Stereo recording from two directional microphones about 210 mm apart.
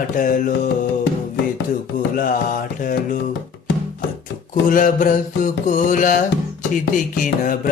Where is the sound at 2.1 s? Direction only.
40° left (ahead or behind).